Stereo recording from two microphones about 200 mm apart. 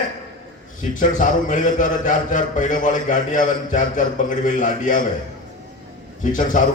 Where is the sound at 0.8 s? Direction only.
40° left (ahead or behind).